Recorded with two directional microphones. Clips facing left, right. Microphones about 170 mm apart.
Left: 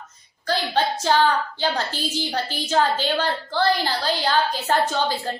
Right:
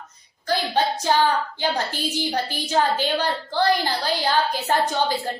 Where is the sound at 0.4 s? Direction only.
15° right (ahead or behind).